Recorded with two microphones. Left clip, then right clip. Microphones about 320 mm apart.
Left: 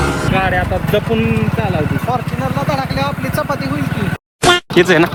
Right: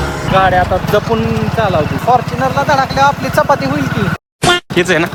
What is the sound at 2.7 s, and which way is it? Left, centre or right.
Speech, right.